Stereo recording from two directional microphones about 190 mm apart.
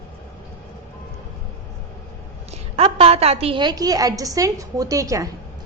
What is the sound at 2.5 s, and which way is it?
A woman's voice, 30° right (ahead or behind).